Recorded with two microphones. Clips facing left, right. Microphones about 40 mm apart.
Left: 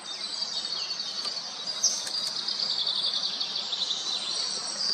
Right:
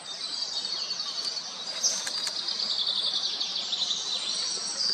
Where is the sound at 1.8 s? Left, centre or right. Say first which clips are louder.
Even; centre.